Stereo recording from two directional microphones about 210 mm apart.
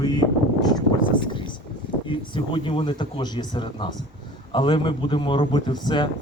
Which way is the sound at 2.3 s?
25° left (ahead or behind).